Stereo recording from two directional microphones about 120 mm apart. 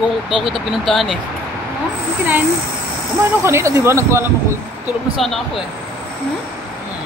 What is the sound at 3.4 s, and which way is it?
Speech, 20° right (ahead or behind).